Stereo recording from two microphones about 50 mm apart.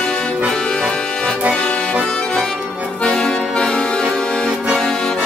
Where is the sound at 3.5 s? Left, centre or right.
Centre.